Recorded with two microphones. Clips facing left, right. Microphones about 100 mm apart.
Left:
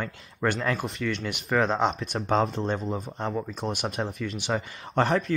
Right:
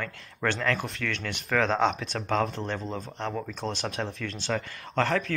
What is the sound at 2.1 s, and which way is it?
Speech, 15° left (ahead or behind).